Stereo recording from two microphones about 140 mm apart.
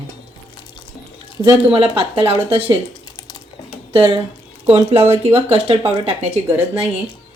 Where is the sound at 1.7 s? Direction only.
40° right (ahead or behind).